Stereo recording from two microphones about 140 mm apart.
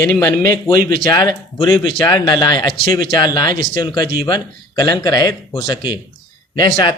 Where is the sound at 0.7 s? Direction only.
90° right.